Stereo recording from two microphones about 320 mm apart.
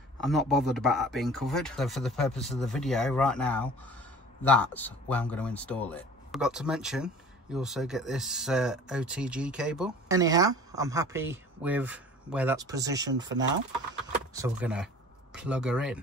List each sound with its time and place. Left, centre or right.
0.2 s speech: centre